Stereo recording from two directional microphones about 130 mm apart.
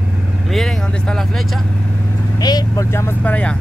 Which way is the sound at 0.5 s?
5° left (ahead or behind).